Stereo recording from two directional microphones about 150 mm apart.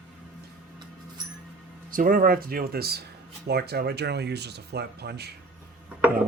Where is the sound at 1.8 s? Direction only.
70° right (ahead or behind); by 5.3 s 90° right.